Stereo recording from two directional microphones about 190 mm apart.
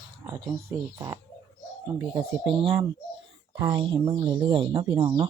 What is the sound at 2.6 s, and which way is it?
Speech, 25° right (ahead or behind).